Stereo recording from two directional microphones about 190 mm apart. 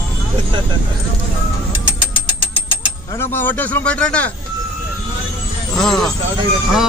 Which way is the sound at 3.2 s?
10° left (ahead or behind).